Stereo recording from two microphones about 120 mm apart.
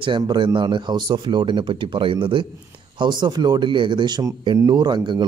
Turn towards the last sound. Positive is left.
turn(degrees=-40)  # may be behind; listen again after turning